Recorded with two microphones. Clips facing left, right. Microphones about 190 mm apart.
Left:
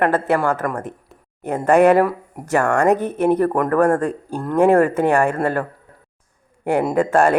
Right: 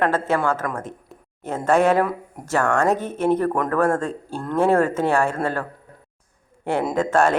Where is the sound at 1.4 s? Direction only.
15° left (ahead or behind).